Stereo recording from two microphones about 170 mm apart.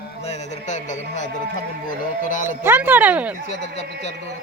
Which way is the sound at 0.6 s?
45° left (ahead or behind).